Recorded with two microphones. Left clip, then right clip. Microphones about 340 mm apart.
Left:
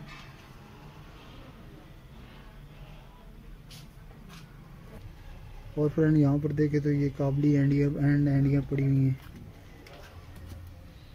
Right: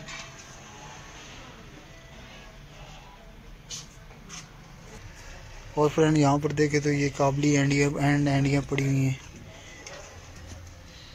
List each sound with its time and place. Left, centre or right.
5.9 s speech: right